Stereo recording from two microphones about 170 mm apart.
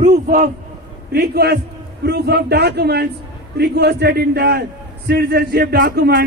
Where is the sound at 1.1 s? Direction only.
70° right (ahead or behind).